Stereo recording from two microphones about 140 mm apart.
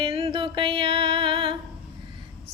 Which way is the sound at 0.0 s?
45° right (ahead or behind).